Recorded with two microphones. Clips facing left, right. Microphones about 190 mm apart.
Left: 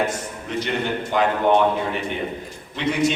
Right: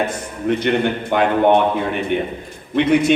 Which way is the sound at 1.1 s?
60° right (ahead or behind).